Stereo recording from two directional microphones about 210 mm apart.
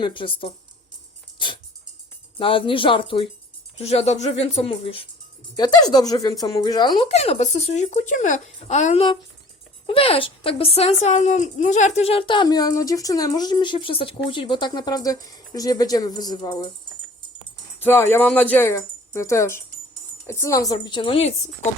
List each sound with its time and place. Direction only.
0.0 s a woman's voice: 25° left (ahead or behind)
2.4 s a woman's voice: 25° left (ahead or behind)
17.7 s a woman's voice: 10° left (ahead or behind); by 21.7 s 30° left (ahead or behind)